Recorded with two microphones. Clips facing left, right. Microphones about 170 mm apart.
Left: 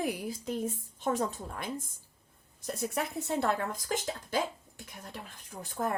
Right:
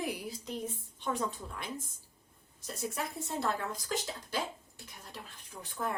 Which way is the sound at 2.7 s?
65° left (ahead or behind).